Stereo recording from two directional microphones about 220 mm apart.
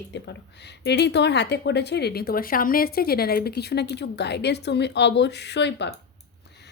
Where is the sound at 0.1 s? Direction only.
50° left (ahead or behind).